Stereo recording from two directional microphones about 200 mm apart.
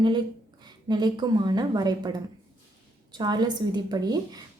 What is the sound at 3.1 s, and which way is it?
A woman's voice, 20° right (ahead or behind).